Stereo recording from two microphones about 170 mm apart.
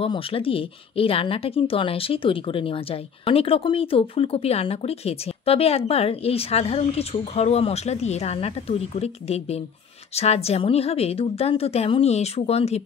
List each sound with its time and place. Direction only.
0.0 s speech: 35° left (ahead or behind)